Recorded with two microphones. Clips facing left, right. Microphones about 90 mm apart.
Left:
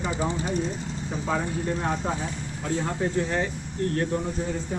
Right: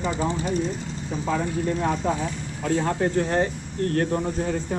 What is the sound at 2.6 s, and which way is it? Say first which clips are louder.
Speech: right 4 dB; 80° right.